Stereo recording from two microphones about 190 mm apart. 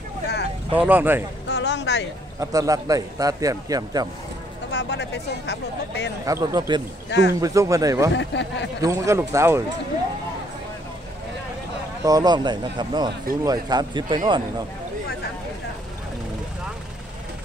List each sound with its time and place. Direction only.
0.7 s a man's voice: 10° right (ahead or behind)
1.5 s a sound: 65° left (ahead or behind)
2.4 s a man's voice: 20° right (ahead or behind)
4.7 s speech: 65° left (ahead or behind)
6.2 s a man's voice: 20° right (ahead or behind)
7.1 s speech: 65° left (ahead or behind)
7.3 s a man's voice: 15° right (ahead or behind)
8.2 s speech: 70° left (ahead or behind)
8.8 s a man's voice: 15° right (ahead or behind)
12.0 s a man's voice: 20° right (ahead or behind)